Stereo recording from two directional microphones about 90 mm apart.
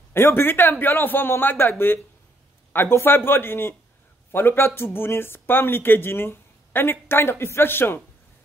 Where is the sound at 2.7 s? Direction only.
25° left (ahead or behind).